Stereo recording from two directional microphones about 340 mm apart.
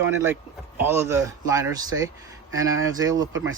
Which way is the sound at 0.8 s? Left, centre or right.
Centre.